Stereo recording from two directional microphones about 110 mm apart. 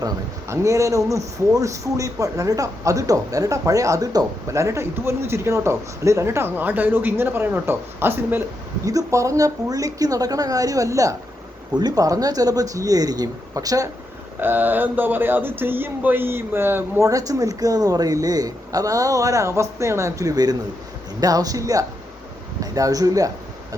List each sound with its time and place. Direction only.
0.0 s speech: 25° right (ahead or behind)
8.9 s a man's voice: 30° right (ahead or behind)
14.4 s speech: 15° right (ahead or behind)
17.1 s a man's voice: 30° right (ahead or behind)